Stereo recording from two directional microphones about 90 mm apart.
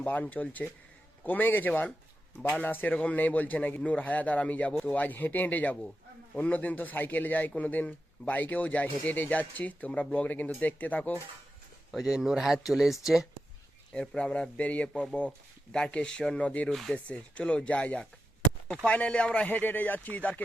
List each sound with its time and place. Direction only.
0.0 s speech: 20° left (ahead or behind)
4.7 s speech: 5° left (ahead or behind)
4.9 s speech: 20° left (ahead or behind)
11.9 s speech: 5° right (ahead or behind)
13.9 s speech: 10° left (ahead or behind)